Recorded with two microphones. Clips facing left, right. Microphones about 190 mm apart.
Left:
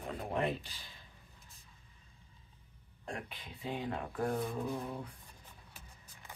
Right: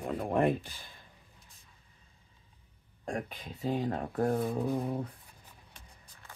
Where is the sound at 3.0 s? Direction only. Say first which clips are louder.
Right 7 dB; 45° right (ahead or behind).